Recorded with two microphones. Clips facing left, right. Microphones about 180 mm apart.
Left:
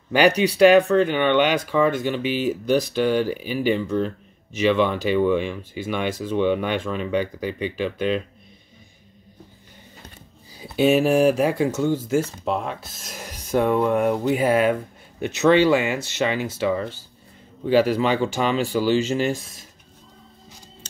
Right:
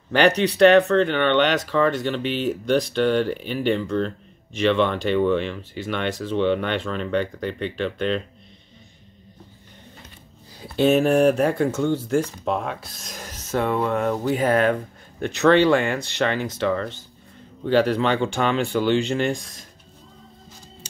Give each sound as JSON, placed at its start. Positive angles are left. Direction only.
{"t": 0.1, "sound": "speech", "side_deg": 10}
{"t": 10.6, "sound": "speech", "side_deg": 5}